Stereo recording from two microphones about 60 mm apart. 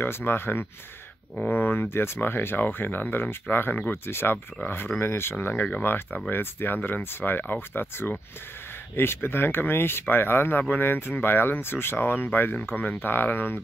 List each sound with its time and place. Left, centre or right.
0.0 s speech: left